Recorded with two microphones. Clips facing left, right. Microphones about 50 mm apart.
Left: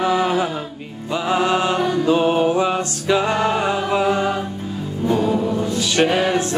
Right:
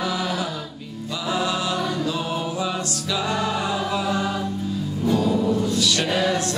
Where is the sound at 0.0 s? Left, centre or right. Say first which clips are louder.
Left 7 dB; left.